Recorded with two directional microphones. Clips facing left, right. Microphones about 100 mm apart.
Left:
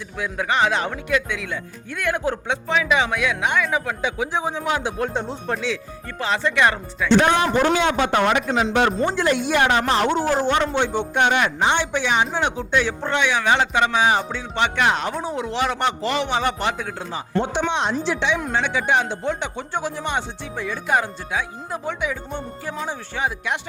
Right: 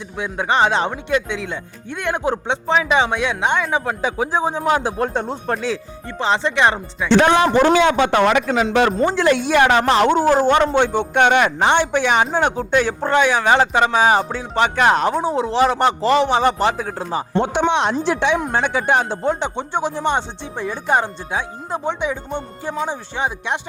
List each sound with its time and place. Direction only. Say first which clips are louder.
0.2 s speech: right 3 dB; 25° right (ahead or behind); by 5.7 s 50° right (ahead or behind)
6.1 s speech: right 3 dB; 25° right (ahead or behind)
7.1 s a man's voice: right 3 dB; 90° right
10.2 s speech: right 5 dB; 50° right (ahead or behind)
17.7 s a woman's voice: right 5 dB; 65° right (ahead or behind)
18.0 s a woman's voice: right 4 dB; 50° right (ahead or behind); by 23.6 s 25° right (ahead or behind)